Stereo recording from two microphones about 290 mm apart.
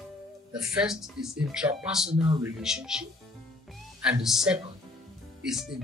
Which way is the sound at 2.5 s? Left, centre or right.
Centre.